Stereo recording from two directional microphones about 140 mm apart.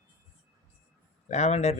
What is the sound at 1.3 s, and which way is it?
Speech, 50° left (ahead or behind).